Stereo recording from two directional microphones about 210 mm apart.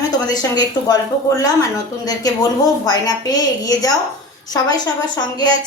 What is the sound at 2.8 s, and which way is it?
A woman's voice, 20° left (ahead or behind).